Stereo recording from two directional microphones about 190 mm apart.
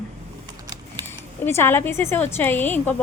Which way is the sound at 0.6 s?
20° right (ahead or behind).